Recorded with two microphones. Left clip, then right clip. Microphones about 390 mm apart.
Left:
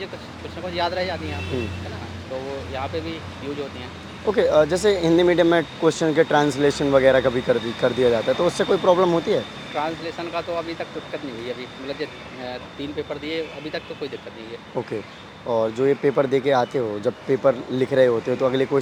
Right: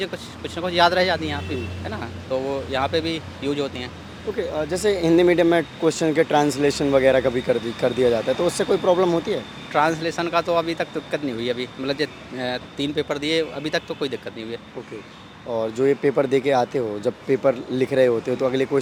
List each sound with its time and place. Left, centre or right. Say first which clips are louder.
0.7 s speech: right 7 dB; right
2.3 s a sound: right 6 dB; right
2.7 s speech: right 6 dB; right
4.4 s speech: left 9 dB; centre
4.7 s speech: left 1 dB; centre
9.7 s speech: right 6 dB; right
15.4 s speech: left 1 dB; centre